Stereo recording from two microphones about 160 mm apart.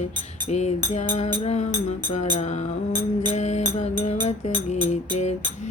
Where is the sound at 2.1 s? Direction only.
45° left (ahead or behind).